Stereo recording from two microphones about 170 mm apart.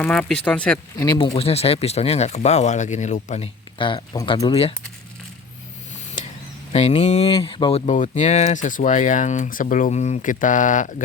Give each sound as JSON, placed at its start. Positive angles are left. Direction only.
{"t": 0.0, "sound": "speech", "side_deg": 5}
{"t": 0.9, "sound": "speech", "side_deg": 25}
{"t": 6.7, "sound": "speech", "side_deg": 40}
{"t": 7.9, "sound": "speech", "side_deg": 45}